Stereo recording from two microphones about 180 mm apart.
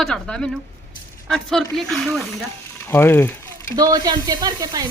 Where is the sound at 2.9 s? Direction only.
10° left (ahead or behind).